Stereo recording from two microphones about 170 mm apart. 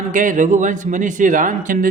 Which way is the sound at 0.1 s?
50° right (ahead or behind).